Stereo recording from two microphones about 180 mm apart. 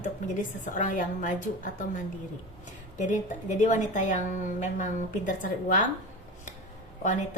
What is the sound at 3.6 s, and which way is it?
A woman's voice, 45° left (ahead or behind).